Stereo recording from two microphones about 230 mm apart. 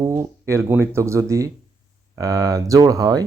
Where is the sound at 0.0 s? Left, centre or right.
Centre.